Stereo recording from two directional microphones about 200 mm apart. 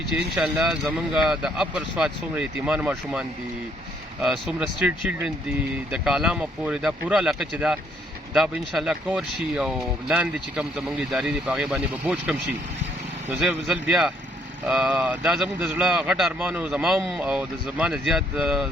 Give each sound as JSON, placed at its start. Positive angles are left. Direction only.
{"t": 0.3, "sound": "speech", "side_deg": -5}